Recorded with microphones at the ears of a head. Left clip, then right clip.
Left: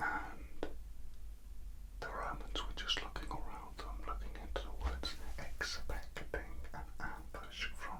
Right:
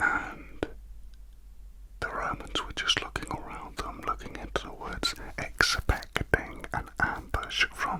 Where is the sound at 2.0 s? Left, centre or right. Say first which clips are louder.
Right 11 dB; right.